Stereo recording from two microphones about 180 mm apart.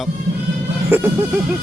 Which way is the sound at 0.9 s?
10° right (ahead or behind).